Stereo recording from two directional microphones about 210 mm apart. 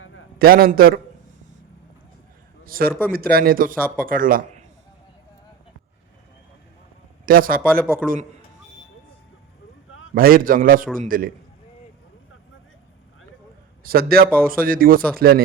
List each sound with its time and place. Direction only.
0.3 s speech: 45° right (ahead or behind)
2.6 s a man's voice: 45° right (ahead or behind)
7.3 s a man's voice: 45° right (ahead or behind)
10.2 s a man's voice: 45° right (ahead or behind)
13.8 s speech: 45° right (ahead or behind)